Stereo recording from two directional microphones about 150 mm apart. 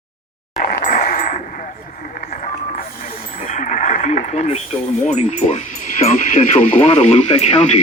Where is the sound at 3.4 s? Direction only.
60° left (ahead or behind).